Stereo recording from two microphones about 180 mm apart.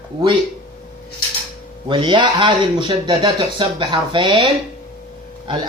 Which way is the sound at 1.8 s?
25° right (ahead or behind).